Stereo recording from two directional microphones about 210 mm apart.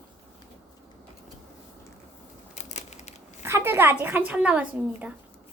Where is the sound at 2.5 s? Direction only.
35° left (ahead or behind).